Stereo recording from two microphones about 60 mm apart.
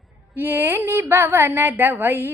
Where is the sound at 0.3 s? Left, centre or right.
Right.